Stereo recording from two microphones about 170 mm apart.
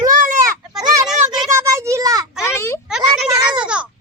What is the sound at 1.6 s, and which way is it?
Speech, 20° right (ahead or behind).